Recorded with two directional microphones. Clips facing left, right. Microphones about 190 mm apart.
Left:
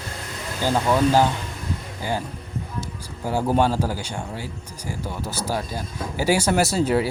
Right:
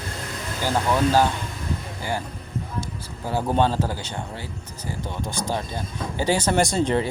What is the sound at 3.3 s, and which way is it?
Speech, 10° left (ahead or behind).